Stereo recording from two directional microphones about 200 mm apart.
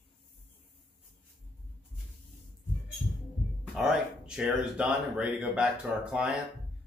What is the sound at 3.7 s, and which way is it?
A man's voice, centre (ahead or behind).